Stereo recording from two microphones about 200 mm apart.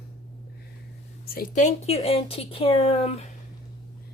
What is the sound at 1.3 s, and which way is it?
Speech, 45° left (ahead or behind).